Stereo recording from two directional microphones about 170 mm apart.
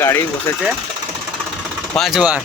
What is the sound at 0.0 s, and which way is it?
Speech, 15° left (ahead or behind).